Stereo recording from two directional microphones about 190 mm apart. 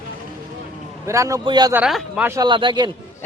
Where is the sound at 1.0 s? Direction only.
15° right (ahead or behind).